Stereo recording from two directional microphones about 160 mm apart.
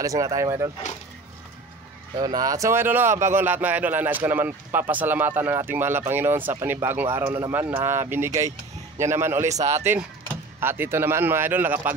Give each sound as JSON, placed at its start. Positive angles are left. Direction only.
{"t": 0.0, "sound": "speech", "side_deg": -20}
{"t": 2.1, "sound": "speech", "side_deg": -25}